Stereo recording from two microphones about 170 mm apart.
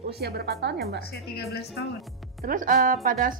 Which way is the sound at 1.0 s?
70° left (ahead or behind).